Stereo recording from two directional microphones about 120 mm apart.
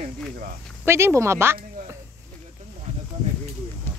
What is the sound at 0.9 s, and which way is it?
Speech, 20° right (ahead or behind).